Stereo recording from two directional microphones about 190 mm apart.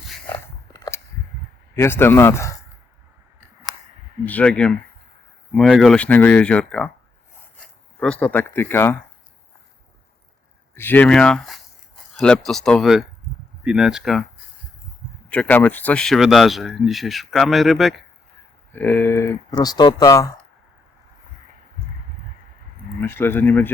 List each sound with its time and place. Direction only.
0.7 s a sound: 15° left (ahead or behind)
1.7 s speech: 10° left (ahead or behind)
4.3 s speech: 5° left (ahead or behind)
10.8 s speech: 10° left (ahead or behind)
15.3 s speech: 10° left (ahead or behind)
23.0 s speech: 10° left (ahead or behind)